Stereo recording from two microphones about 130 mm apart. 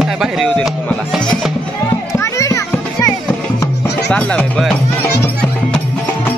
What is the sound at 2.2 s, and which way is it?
Children playing, 25° left (ahead or behind).